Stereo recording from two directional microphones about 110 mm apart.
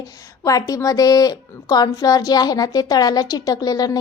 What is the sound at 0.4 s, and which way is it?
A woman's voice, 30° left (ahead or behind).